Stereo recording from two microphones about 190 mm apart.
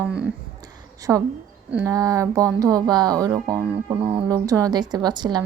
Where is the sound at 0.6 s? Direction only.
20° right (ahead or behind).